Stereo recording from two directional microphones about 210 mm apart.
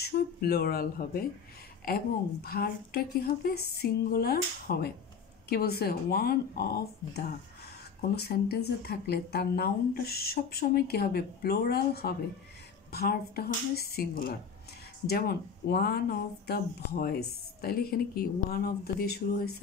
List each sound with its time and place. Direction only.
0.0 s speech: 50° left (ahead or behind)